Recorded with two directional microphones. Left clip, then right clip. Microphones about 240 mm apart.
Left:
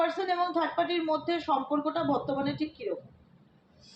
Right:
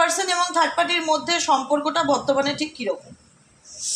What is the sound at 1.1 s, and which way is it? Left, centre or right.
Speech, right.